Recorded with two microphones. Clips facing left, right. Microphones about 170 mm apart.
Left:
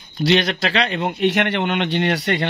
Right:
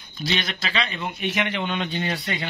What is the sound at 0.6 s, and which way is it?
Speech, 70° left (ahead or behind).